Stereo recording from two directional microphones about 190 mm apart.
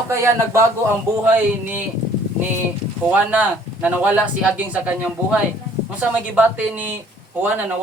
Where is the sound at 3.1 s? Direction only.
10° right (ahead or behind).